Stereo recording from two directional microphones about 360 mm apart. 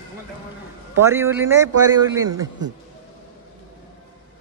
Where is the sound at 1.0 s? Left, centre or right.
Centre.